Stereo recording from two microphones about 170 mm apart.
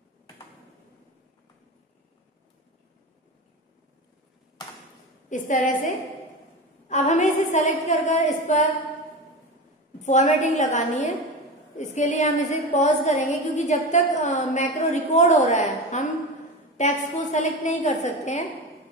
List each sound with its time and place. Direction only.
5.3 s a woman's voice: 50° left (ahead or behind)
6.9 s a woman's voice: 45° left (ahead or behind)
9.9 s a woman's voice: 45° left (ahead or behind)